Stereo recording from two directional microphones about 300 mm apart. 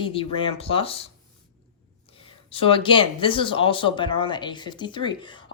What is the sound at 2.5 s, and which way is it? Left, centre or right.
Speech, centre.